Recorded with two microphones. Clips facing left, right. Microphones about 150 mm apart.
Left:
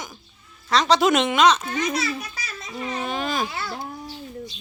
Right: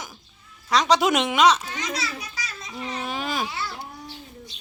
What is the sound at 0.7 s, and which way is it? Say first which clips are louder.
Speech: left 1 dB; 10° right (ahead or behind).